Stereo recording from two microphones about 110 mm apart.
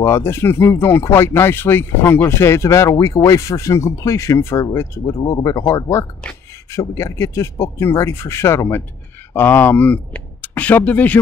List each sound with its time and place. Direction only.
0.0 s speech: 25° left (ahead or behind)